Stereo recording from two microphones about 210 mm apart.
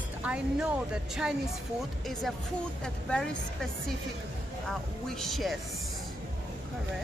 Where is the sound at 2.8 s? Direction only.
Centre (ahead or behind).